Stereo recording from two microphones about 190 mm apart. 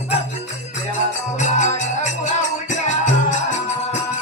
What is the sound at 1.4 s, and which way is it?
Music, 40° left (ahead or behind).